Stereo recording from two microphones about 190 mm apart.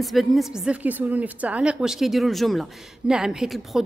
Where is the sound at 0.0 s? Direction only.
Centre (ahead or behind).